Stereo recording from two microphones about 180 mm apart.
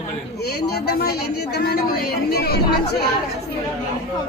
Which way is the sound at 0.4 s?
60° left (ahead or behind).